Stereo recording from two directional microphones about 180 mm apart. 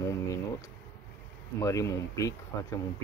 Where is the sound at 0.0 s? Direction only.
15° left (ahead or behind).